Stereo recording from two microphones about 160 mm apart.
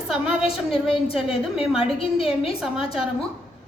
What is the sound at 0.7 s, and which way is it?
Speech, 35° left (ahead or behind).